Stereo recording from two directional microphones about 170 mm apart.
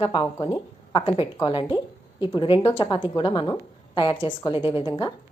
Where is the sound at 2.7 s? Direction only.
30° left (ahead or behind).